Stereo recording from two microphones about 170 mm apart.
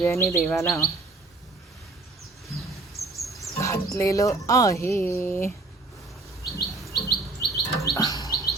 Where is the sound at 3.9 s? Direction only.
20° left (ahead or behind).